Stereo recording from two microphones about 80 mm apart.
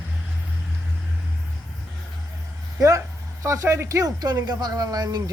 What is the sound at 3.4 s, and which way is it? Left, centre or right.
Speech, right.